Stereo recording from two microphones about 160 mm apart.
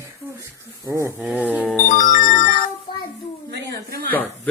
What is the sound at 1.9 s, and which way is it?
Music, 55° left (ahead or behind).